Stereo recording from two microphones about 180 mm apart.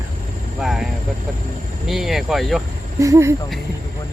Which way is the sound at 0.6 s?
Centre (ahead or behind).